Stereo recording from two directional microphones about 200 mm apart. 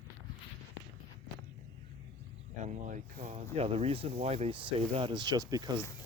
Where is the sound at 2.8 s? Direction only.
40° right (ahead or behind); by 5.8 s 20° right (ahead or behind).